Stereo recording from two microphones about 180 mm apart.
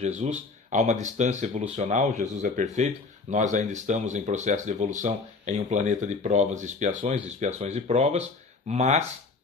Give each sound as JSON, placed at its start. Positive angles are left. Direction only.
{"t": 0.2, "sound": "speech", "side_deg": -40}